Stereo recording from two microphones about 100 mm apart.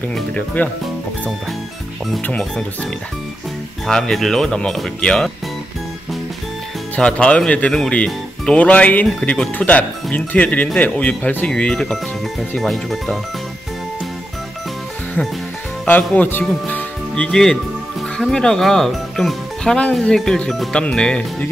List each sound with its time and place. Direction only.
0.1 s speech: 10° left (ahead or behind)
2.2 s speech: 10° left (ahead or behind)
7.0 s speech: 10° left (ahead or behind)
16.0 s speech: 10° left (ahead or behind)